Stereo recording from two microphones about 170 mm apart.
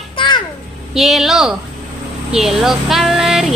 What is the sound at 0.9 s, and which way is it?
Child singing, centre (ahead or behind).